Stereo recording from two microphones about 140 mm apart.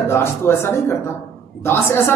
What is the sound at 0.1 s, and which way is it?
A man's voice, 15° left (ahead or behind).